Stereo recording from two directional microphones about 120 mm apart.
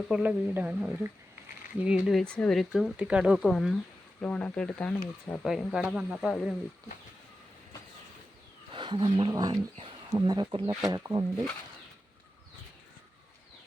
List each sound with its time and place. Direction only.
0.1 s speech: 10° right (ahead or behind)
2.2 s speech: 10° left (ahead or behind)
4.2 s speech: 10° left (ahead or behind)
5.5 s speech: 5° right (ahead or behind)
8.7 s speech: 40° right (ahead or behind)
9.7 s a sound: 45° right (ahead or behind)
10.2 s speech: 30° right (ahead or behind)